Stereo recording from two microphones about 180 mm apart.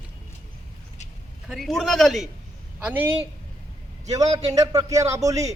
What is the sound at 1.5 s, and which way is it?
A man's voice, centre (ahead or behind).